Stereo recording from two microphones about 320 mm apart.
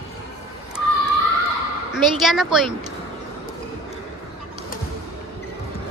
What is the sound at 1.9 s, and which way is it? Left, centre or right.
Speech, centre.